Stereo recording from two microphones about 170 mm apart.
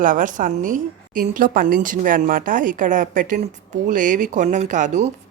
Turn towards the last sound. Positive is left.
turn(degrees=-45)  # may be behind; listen again after turning